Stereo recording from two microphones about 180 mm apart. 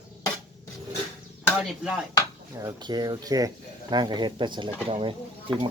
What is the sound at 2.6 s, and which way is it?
Speech, 20° right (ahead or behind).